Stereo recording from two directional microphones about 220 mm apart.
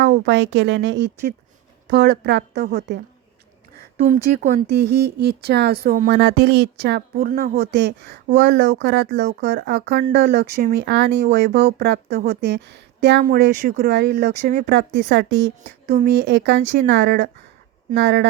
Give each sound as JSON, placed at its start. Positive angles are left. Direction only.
{"t": 0.3, "sound": "speech", "side_deg": -55}
{"t": 3.9, "sound": "speech", "side_deg": -35}
{"t": 4.7, "sound": "speech", "side_deg": -50}
{"t": 7.3, "sound": "speech", "side_deg": -40}
{"t": 7.7, "sound": "speech", "side_deg": -50}
{"t": 13.2, "sound": "speech", "side_deg": -40}